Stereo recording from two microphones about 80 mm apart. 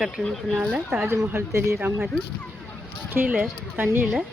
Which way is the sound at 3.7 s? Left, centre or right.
Right.